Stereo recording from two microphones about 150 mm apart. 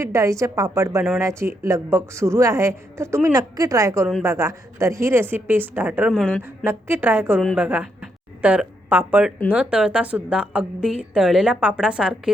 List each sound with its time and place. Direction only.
0.0 s a woman's voice: 20° right (ahead or behind)
6.1 s a woman's voice: 5° left (ahead or behind)
6.7 s a woman's voice: 15° right (ahead or behind)